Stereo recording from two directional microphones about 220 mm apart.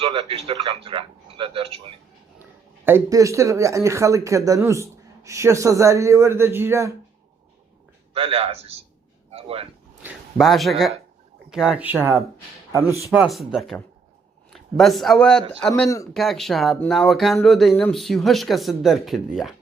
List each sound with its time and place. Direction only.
0.0 s speech: 25° right (ahead or behind)
2.8 s speech: 10° right (ahead or behind)
8.1 s speech: 25° right (ahead or behind)
10.0 s a sound: 5° right (ahead or behind)
11.5 s speech: 5° right (ahead or behind)